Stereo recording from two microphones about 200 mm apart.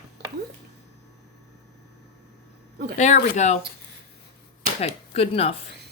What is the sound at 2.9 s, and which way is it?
Speech, 35° left (ahead or behind).